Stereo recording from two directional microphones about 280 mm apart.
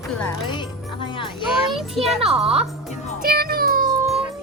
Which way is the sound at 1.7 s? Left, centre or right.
Centre.